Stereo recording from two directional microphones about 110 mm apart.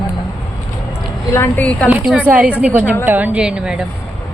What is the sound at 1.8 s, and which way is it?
Speech, 10° right (ahead or behind).